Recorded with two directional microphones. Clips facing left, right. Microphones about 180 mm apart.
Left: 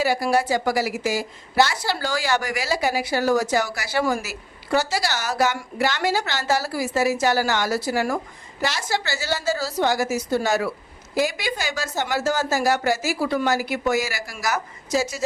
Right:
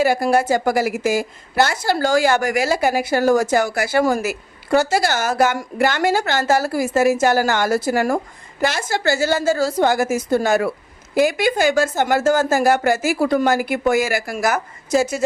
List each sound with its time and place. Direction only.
0.0 s a woman's voice: 50° right (ahead or behind)